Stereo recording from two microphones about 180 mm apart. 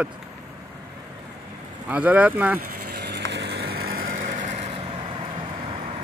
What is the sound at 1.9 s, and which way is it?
Speech, 10° right (ahead or behind).